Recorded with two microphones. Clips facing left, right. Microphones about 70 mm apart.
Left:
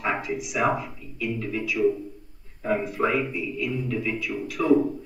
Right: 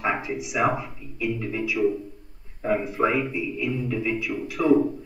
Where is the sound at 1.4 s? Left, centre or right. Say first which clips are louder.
Right 1 dB; centre.